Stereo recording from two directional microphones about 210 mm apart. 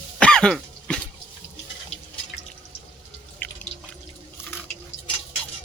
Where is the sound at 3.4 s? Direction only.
10° left (ahead or behind).